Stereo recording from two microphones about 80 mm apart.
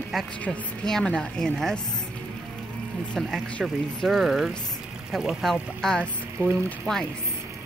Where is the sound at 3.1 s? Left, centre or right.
Centre.